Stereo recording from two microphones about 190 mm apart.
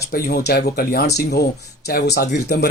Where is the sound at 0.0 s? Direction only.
55° left (ahead or behind).